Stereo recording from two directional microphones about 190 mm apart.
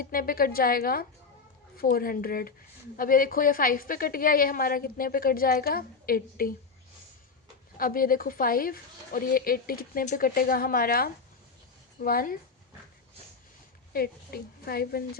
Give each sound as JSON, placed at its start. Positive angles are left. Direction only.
{"t": 0.0, "sound": "a woman's voice", "side_deg": 50}
{"t": 7.8, "sound": "a woman's voice", "side_deg": 50}
{"t": 13.9, "sound": "a woman's voice", "side_deg": 55}